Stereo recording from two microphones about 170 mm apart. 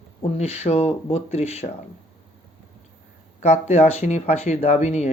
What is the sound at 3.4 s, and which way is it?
Speech, 40° left (ahead or behind).